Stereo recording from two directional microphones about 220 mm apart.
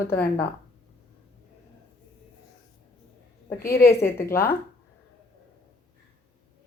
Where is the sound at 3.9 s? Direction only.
10° left (ahead or behind).